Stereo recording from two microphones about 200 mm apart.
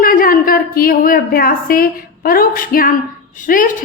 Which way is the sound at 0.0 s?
45° left (ahead or behind).